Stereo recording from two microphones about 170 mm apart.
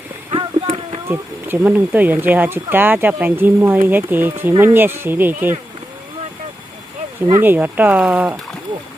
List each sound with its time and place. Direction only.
0.3 s a sound: 30° right (ahead or behind)
1.0 s speech: 10° right (ahead or behind)
7.4 s speech: 10° right (ahead or behind)